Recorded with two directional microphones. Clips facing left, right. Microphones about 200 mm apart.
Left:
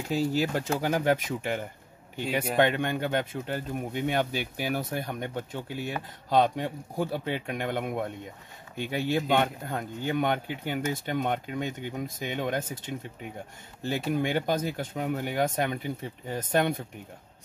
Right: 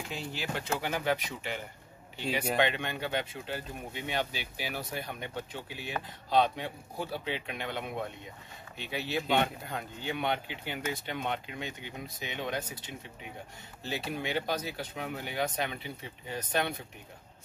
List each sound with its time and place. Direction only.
0.1 s speech: 40° left (ahead or behind)